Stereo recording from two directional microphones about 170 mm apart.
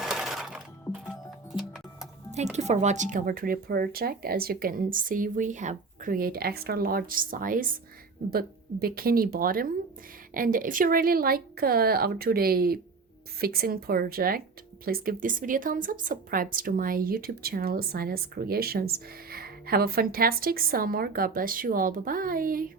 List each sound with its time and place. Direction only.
0.0 s music: centre (ahead or behind)
2.6 s a woman's voice: 40° right (ahead or behind)